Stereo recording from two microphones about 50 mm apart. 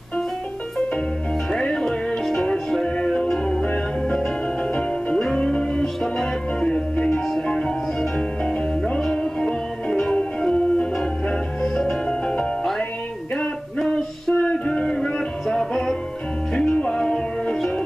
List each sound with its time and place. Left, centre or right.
1.5 s music: centre
13.4 s music: centre
14.4 s music: centre